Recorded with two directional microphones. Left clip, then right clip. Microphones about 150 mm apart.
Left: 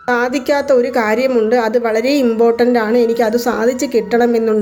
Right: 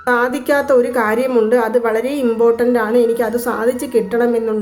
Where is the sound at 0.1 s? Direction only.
15° left (ahead or behind).